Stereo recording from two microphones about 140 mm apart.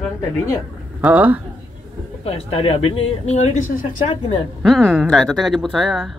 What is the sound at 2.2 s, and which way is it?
Speech, 45° left (ahead or behind).